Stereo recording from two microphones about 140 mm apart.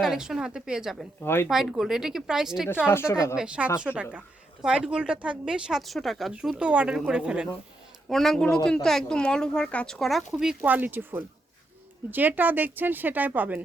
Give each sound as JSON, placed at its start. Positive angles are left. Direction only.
{"t": 0.0, "sound": "speech", "side_deg": -5}
{"t": 1.2, "sound": "a woman's voice", "side_deg": 15}
{"t": 1.5, "sound": "speech", "side_deg": -5}
{"t": 2.8, "sound": "a woman's voice", "side_deg": 15}
{"t": 3.3, "sound": "a woman's voice", "side_deg": -5}